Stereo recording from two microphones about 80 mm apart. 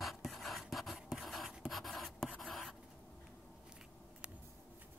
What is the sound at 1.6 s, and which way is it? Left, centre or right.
Writing, centre.